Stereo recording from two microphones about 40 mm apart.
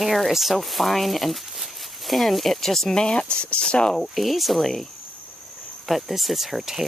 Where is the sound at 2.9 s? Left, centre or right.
Left.